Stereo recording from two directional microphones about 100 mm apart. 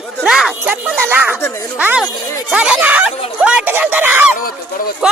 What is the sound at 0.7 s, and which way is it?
Speech, 15° right (ahead or behind).